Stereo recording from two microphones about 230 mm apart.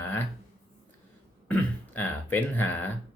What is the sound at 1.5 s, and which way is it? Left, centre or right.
Speech, centre.